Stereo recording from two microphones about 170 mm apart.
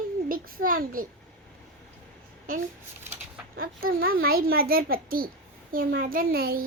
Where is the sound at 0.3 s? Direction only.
55° right (ahead or behind).